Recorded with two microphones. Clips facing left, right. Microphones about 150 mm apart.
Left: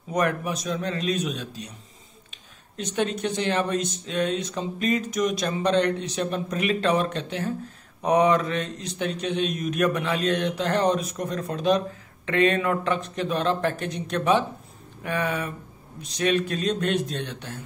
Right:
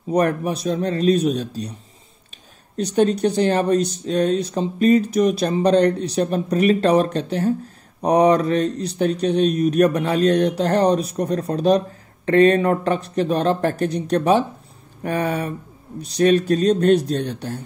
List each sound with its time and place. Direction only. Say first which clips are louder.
0.1 s speech: right 6 dB; 35° right (ahead or behind)
2.8 s speech: right 9 dB; 35° right (ahead or behind)